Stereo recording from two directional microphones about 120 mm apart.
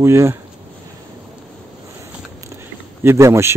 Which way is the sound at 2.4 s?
25° right (ahead or behind).